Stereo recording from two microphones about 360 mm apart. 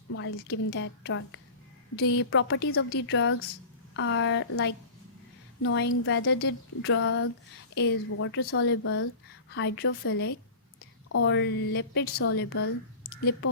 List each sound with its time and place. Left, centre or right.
0.1 s a woman's voice: left